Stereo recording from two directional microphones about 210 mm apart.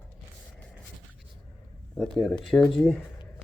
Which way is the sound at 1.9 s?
5° left (ahead or behind).